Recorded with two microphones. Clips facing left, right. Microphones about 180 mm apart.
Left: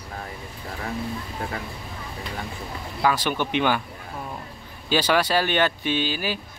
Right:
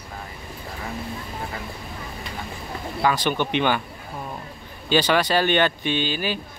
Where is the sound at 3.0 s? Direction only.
5° left (ahead or behind).